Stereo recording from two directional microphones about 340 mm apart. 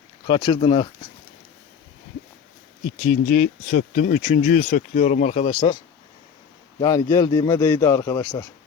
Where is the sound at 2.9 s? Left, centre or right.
Left.